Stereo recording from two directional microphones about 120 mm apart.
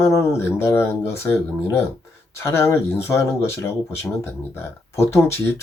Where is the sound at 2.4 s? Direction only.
20° left (ahead or behind).